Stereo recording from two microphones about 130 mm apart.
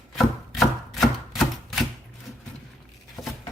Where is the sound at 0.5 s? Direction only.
Centre (ahead or behind).